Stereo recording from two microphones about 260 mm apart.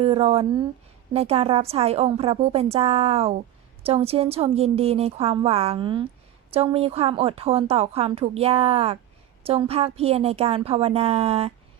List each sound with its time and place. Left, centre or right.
0.0 s a woman's voice: right